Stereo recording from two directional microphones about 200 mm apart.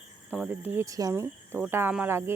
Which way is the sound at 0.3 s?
10° right (ahead or behind).